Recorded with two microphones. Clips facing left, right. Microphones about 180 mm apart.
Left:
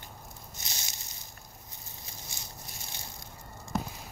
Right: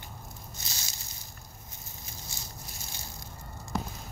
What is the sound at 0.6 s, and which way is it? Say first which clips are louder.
Snake: left 2 dB; 20° left (ahead or behind).